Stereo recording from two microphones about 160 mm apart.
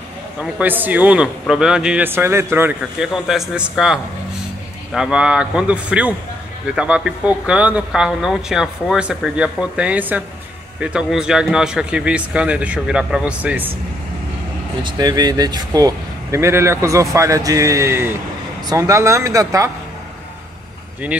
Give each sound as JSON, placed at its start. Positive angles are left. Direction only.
{"t": 0.4, "sound": "a man's voice", "side_deg": -10}
{"t": 14.8, "sound": "speech", "side_deg": -25}